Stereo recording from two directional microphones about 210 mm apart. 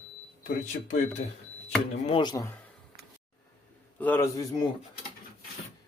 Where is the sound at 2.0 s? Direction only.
20° left (ahead or behind).